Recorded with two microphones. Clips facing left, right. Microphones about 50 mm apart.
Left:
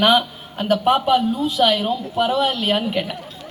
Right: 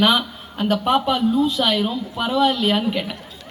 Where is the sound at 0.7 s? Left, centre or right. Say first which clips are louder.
Left 3 dB; left.